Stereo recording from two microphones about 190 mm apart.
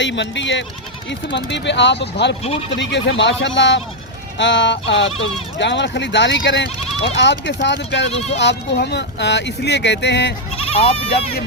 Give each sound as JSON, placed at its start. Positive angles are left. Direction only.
{"t": 0.0, "sound": "speech", "side_deg": 70}
{"t": 10.6, "sound": "speech", "side_deg": 30}